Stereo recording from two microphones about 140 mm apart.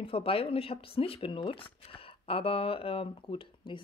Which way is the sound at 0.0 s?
40° left (ahead or behind).